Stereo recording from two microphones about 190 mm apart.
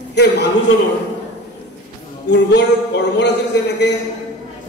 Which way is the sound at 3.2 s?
65° left (ahead or behind).